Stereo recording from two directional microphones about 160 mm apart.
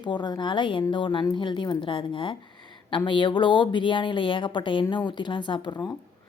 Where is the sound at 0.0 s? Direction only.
30° left (ahead or behind).